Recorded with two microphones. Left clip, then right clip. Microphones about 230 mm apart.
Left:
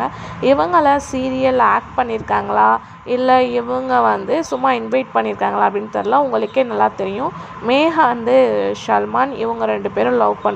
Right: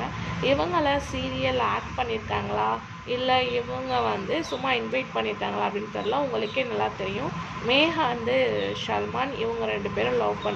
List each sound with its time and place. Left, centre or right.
0.4 s a woman's voice: left